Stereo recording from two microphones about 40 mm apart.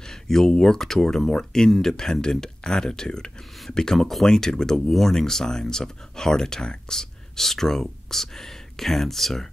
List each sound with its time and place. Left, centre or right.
0.0 s speech: centre